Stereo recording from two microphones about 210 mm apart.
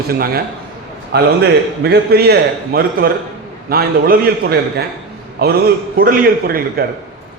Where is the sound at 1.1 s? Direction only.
50° right (ahead or behind).